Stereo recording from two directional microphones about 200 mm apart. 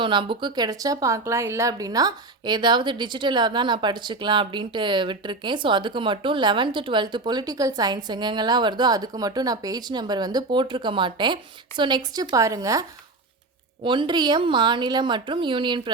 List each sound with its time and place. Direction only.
0.0 s speech: 25° right (ahead or behind)
13.8 s speech: 25° right (ahead or behind)